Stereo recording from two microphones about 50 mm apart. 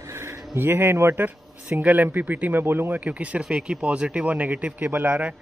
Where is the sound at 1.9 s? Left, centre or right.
Right.